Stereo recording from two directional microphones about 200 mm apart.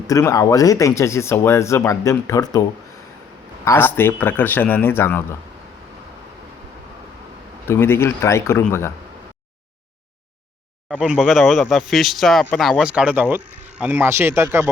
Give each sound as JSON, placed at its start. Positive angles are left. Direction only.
{"t": 0.1, "sound": "speech", "side_deg": 15}
{"t": 7.7, "sound": "speech", "side_deg": 10}
{"t": 10.8, "sound": "speech", "side_deg": -5}